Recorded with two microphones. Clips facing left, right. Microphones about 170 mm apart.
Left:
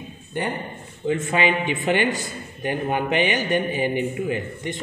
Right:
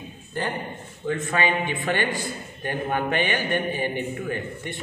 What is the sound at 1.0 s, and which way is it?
A man's voice, 20° left (ahead or behind).